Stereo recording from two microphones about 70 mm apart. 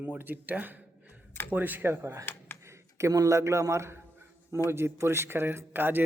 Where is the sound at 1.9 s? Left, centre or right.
Right.